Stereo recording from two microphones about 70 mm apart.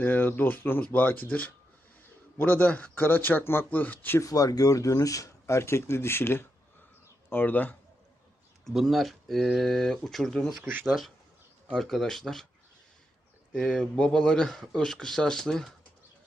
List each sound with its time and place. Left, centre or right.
0.0 s speech: left
4.2 s speech: left
8.6 s speech: centre
10.6 s speech: right
11.7 s speech: centre
13.5 s speech: centre